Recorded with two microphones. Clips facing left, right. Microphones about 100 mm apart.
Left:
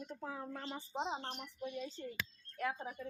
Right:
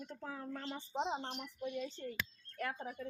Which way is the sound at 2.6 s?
5° left (ahead or behind).